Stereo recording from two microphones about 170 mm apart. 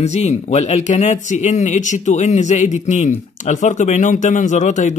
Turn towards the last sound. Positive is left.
turn(degrees=45)  # may be behind; listen again after turning